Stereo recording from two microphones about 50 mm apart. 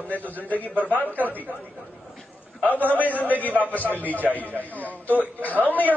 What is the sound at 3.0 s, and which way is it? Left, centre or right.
A man's voice, left.